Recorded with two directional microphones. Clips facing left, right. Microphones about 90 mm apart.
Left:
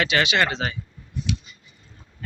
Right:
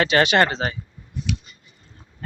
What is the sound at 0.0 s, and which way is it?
Speech, 40° right (ahead or behind).